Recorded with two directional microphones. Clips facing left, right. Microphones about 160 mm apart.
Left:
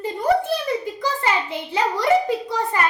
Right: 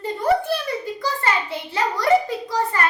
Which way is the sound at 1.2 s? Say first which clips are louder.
Left 1 dB; 15° left (ahead or behind).